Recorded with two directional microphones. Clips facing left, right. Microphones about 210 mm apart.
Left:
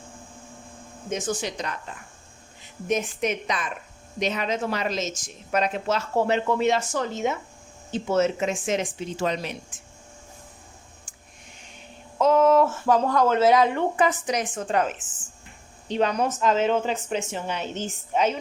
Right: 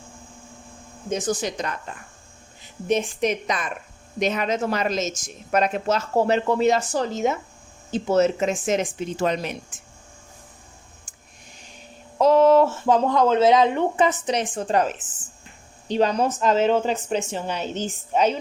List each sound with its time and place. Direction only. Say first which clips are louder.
1.1 s a woman's voice: right 3 dB; 40° right (ahead or behind)
2.8 s a woman's voice: right 3 dB; 30° right (ahead or behind); by 9.6 s 50° right (ahead or behind)
11.1 s a sound: even; 40° right (ahead or behind)
12.2 s a woman's voice: right 3 dB; 35° right (ahead or behind)